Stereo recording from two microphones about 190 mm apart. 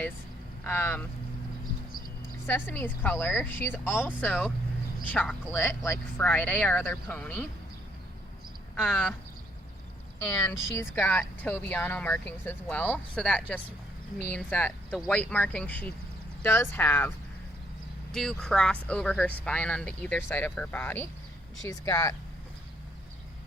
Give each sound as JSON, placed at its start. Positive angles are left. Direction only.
{"t": 0.6, "sound": "speech", "side_deg": 10}
{"t": 2.5, "sound": "speech", "side_deg": 10}
{"t": 8.9, "sound": "speech", "side_deg": 10}
{"t": 10.2, "sound": "speech", "side_deg": 15}
{"t": 18.1, "sound": "speech", "side_deg": 0}